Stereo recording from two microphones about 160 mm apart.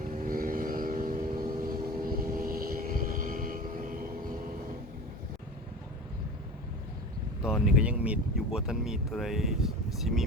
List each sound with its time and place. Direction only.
0.0 s vehicle: 55° right (ahead or behind)
7.4 s speech: 5° right (ahead or behind)